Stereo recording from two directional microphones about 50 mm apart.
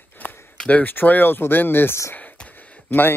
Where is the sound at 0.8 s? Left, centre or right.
Left.